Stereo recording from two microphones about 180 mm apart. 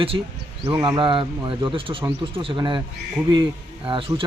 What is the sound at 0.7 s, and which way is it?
Speech, 25° right (ahead or behind).